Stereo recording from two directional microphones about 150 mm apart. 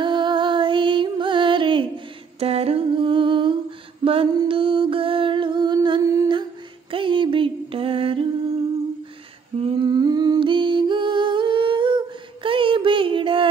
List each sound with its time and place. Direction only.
0.0 s music: 30° right (ahead or behind)
2.4 s humming: 40° right (ahead or behind)
4.0 s mantra: 35° right (ahead or behind)
6.9 s a sound: 35° right (ahead or behind)
9.6 s humming: 35° right (ahead or behind)
12.4 s music: 35° right (ahead or behind)